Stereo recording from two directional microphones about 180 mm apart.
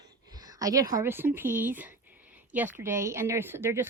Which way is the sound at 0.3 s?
20° right (ahead or behind).